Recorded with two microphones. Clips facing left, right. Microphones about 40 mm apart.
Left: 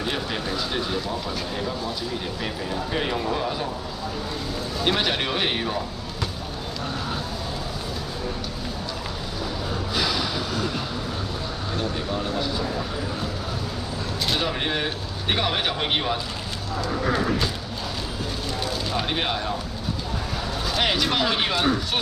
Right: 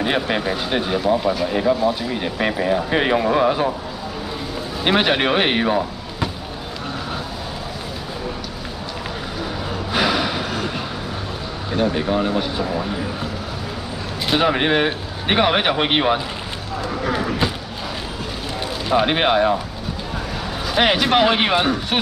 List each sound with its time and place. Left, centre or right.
0.0 s speech: right
4.8 s speech: right
9.9 s a sound: right
11.7 s speech: right
14.2 s speech: right
17.4 s a sound: right
18.9 s speech: right
20.7 s speech: right